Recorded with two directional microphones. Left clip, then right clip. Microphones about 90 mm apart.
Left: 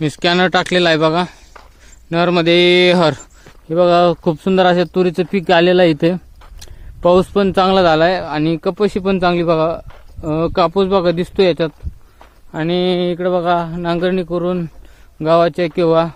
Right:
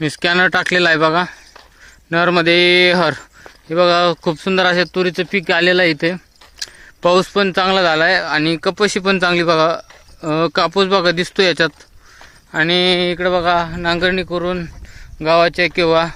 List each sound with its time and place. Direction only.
0.0 s speech: 15° left (ahead or behind)
2.0 s a man's voice: 5° left (ahead or behind)
2.4 s speech: 15° left (ahead or behind); by 4.9 s 30° left (ahead or behind)
4.9 s speech: 50° left (ahead or behind)
5.5 s speech: 35° left (ahead or behind)
6.6 s a sound: 15° left (ahead or behind)
7.2 s speech: 35° left (ahead or behind)
8.2 s a man's voice: 15° left (ahead or behind)
11.3 s a man's voice: centre (ahead or behind); by 16.0 s 20° left (ahead or behind)